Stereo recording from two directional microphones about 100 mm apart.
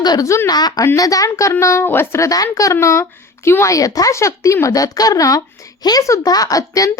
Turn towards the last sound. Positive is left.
turn(degrees=35)  # may be behind; listen again after turning